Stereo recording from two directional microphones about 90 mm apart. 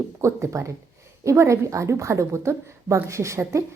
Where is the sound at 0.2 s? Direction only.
35° right (ahead or behind).